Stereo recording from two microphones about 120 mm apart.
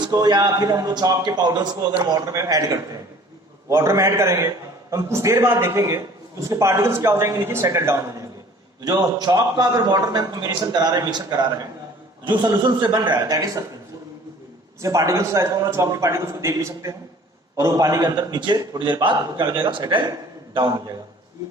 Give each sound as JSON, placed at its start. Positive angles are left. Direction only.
{"t": 0.1, "sound": "a man's voice", "side_deg": -35}
{"t": 14.8, "sound": "a man's voice", "side_deg": -25}